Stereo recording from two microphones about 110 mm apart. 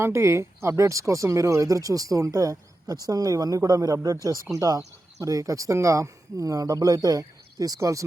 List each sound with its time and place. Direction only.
0.0 s speech: 25° right (ahead or behind)